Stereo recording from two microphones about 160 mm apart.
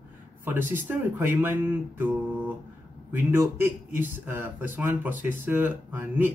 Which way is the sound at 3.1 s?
15° right (ahead or behind).